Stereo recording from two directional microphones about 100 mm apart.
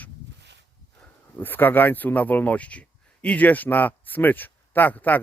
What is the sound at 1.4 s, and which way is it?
Speech, 20° left (ahead or behind).